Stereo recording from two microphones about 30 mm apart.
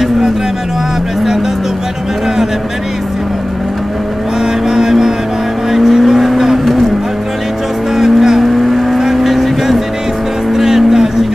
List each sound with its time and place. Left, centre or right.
4.6 s vehicle: centre
7.9 s vehicle: centre
8.4 s vehicle: centre
10.5 s music: centre